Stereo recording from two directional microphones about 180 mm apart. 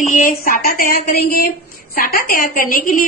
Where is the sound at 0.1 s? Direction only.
50° left (ahead or behind).